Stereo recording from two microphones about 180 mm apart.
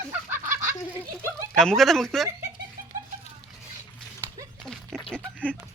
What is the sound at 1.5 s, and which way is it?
Speech, 5° left (ahead or behind).